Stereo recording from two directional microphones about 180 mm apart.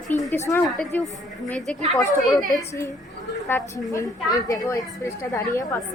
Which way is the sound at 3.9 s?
20° left (ahead or behind).